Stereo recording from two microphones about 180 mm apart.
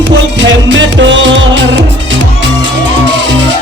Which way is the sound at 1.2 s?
90° right.